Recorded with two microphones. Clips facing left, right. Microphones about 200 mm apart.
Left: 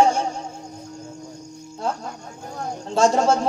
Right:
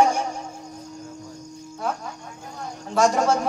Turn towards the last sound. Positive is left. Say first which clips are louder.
# left 2 dB
turn(degrees=25)  # may be behind; listen again after turning